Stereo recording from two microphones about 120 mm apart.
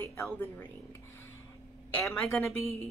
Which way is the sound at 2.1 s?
5° left (ahead or behind).